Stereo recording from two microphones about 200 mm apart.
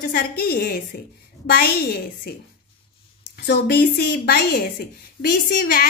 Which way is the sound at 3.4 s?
55° left (ahead or behind).